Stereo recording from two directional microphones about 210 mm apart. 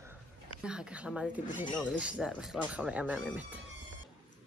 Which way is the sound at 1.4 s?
35° left (ahead or behind).